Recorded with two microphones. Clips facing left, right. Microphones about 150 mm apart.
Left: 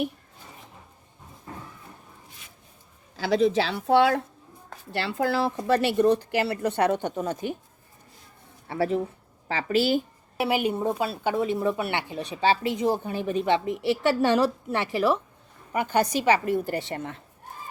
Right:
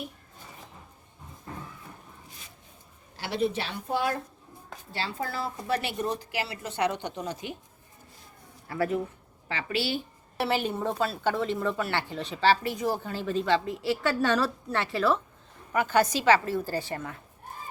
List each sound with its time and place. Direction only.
3.3 s a woman's voice: 90° left
4.9 s a woman's voice: 75° left (ahead or behind); by 7.5 s 50° left (ahead or behind)
8.6 s a woman's voice: 30° left (ahead or behind)
10.3 s a woman's voice: 10° left (ahead or behind)